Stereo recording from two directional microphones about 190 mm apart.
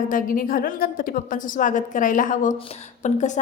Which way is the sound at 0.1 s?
45° left (ahead or behind).